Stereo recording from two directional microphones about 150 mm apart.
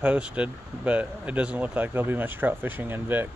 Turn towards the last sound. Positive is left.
turn(degrees=-15)  # may be behind; listen again after turning